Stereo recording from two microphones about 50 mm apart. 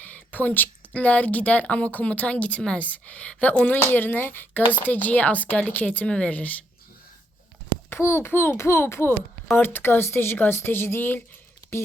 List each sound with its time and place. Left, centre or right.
0.0 s a sound: left
0.9 s speech: left
3.8 s speech: left
7.9 s a child's voice: left
8.5 s speech: left
10.3 s speech: left